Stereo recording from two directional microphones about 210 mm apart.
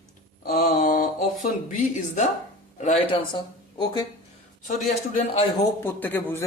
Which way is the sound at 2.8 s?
20° left (ahead or behind).